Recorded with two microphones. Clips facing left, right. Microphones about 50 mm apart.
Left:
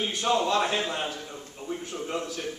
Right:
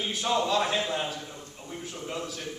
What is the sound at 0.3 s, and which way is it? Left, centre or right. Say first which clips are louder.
Speech: left 2 dB; left.